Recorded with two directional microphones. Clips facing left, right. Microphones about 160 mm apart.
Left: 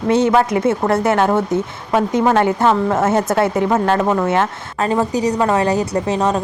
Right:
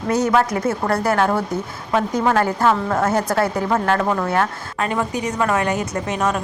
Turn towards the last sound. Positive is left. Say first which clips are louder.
# left 4 dB
turn(degrees=30)  # may be behind; listen again after turning